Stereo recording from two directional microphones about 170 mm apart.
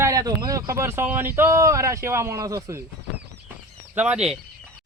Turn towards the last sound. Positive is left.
turn(degrees=-5)  # may be behind; listen again after turning